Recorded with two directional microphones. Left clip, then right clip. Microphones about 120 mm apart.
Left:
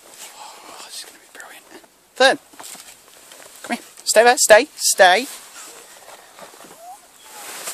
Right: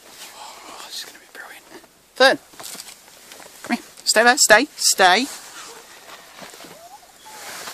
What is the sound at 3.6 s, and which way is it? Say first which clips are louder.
Speech: right 2 dB; 20° left (ahead or behind).